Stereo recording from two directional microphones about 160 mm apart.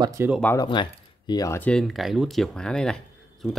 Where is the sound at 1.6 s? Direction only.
5° left (ahead or behind).